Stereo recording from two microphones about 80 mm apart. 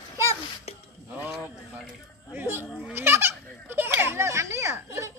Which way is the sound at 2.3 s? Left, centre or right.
Right.